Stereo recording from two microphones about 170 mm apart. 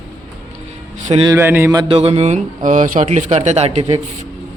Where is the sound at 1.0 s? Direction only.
40° right (ahead or behind).